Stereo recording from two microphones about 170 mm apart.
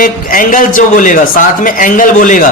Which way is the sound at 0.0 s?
55° left (ahead or behind).